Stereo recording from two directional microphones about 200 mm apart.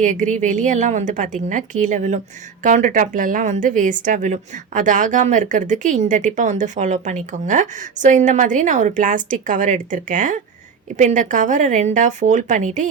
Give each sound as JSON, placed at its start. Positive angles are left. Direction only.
{"t": 0.0, "sound": "a woman's voice", "side_deg": -40}